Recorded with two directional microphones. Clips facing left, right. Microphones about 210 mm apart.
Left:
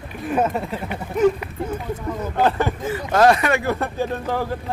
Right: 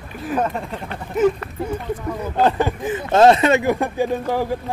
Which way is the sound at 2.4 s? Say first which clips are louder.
Right 2 dB; 15° right (ahead or behind).